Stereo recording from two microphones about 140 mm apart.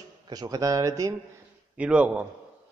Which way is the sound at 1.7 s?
10° right (ahead or behind).